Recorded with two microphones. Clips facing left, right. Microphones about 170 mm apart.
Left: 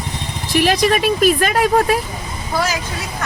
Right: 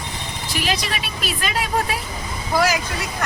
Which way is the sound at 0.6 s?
45° left (ahead or behind).